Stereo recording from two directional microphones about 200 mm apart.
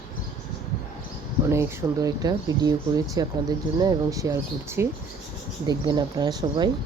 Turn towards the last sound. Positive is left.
turn(degrees=-20)  # may be behind; listen again after turning